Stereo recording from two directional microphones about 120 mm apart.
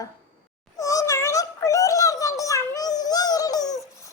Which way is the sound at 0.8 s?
30° left (ahead or behind).